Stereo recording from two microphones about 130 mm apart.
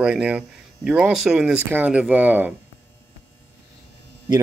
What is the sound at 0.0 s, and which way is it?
Speech, 10° right (ahead or behind).